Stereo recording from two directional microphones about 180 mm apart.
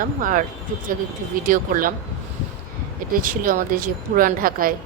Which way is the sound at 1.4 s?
50° right (ahead or behind).